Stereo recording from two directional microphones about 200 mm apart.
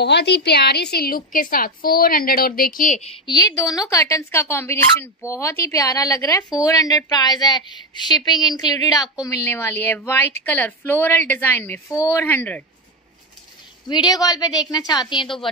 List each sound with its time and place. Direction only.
0.0 s a woman's voice: 55° left (ahead or behind)
3.5 s a woman's voice: 20° left (ahead or behind)
13.8 s a woman's voice: 20° left (ahead or behind)